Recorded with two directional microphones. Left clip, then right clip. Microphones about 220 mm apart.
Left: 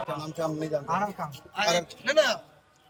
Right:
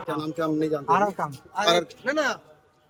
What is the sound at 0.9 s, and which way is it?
A man's voice, 35° right (ahead or behind).